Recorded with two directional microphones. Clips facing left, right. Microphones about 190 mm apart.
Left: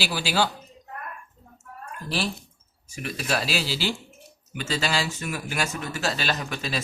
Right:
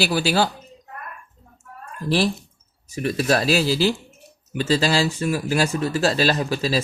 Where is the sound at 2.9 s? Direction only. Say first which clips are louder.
Right 8 dB; 35° right (ahead or behind).